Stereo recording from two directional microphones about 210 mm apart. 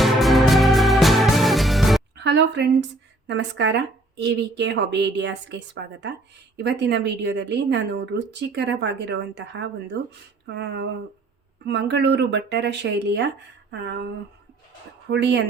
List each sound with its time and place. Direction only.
0.0 s music: centre (ahead or behind)
2.1 s a woman's voice: 55° right (ahead or behind)
15.1 s a woman's voice: 55° right (ahead or behind)